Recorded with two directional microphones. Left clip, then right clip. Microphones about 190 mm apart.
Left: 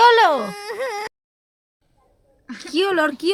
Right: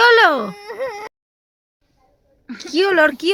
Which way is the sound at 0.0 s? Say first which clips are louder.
Right 1 dB; centre (ahead or behind).